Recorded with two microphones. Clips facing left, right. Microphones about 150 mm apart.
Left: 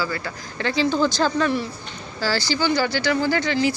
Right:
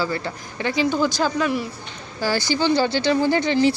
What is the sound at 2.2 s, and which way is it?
A woman's voice, 20° right (ahead or behind).